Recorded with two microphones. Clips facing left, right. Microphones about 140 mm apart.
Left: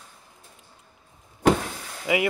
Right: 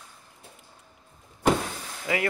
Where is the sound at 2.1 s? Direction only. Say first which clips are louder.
Left 4 dB; 10° left (ahead or behind).